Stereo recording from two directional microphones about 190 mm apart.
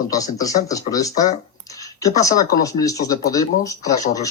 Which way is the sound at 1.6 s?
20° left (ahead or behind).